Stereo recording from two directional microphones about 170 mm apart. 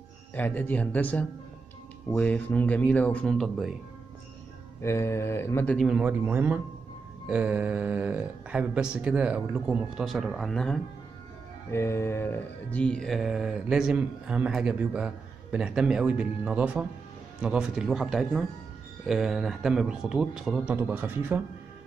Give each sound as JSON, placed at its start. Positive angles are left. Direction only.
{"t": 0.3, "sound": "speech", "side_deg": 10}
{"t": 2.0, "sound": "speech", "side_deg": 10}
{"t": 4.8, "sound": "speech", "side_deg": 15}
{"t": 5.8, "sound": "speech", "side_deg": -5}
{"t": 11.7, "sound": "speech", "side_deg": 15}